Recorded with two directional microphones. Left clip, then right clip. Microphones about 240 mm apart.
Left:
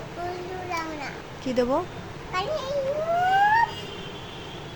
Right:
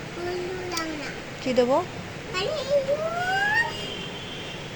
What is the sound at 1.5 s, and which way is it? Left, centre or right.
Speech, centre.